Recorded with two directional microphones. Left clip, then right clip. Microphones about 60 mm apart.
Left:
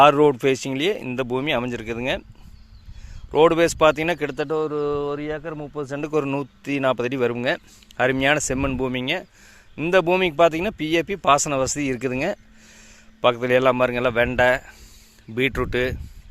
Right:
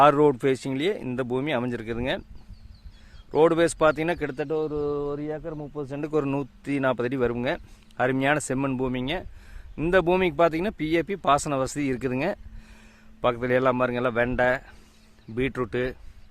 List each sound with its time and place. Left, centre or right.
0.0 s speech: centre
3.3 s speech: centre
4.4 s speech: left
5.4 s speech: left
6.1 s speech: centre
9.7 s speech: centre
11.9 s vehicle: centre
13.2 s speech: centre
15.4 s speech: left